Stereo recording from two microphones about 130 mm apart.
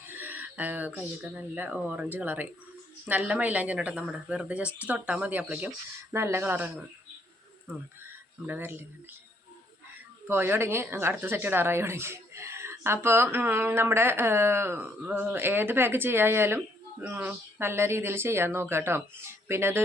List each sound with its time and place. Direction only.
0.2 s speech: 15° right (ahead or behind)
8.4 s speech: 15° right (ahead or behind)
10.2 s speech: 20° right (ahead or behind)